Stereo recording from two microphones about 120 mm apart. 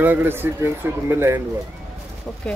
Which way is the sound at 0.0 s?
15° right (ahead or behind).